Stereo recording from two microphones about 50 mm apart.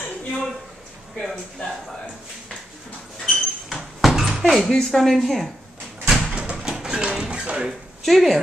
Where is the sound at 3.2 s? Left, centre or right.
Centre.